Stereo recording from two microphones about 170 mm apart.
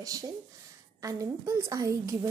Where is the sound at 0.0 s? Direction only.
20° right (ahead or behind).